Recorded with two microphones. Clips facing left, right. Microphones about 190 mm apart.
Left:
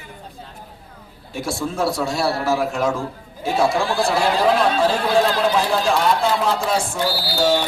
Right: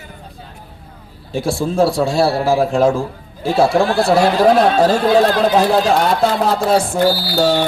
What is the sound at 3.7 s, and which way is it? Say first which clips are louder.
Speech: right 6 dB; 60° right (ahead or behind).